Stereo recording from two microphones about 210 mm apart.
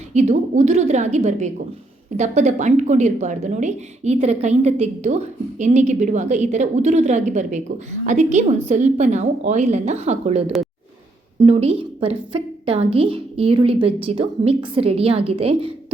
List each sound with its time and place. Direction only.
0.1 s a woman's voice: 30° right (ahead or behind)